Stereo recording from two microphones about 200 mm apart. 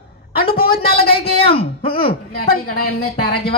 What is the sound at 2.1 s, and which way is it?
Speech, 45° left (ahead or behind).